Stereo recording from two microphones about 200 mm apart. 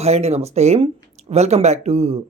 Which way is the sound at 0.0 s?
30° right (ahead or behind).